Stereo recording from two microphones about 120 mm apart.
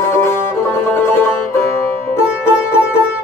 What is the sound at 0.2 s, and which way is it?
Music, 20° left (ahead or behind).